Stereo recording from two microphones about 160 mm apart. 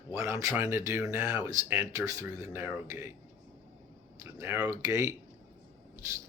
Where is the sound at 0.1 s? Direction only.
20° right (ahead or behind).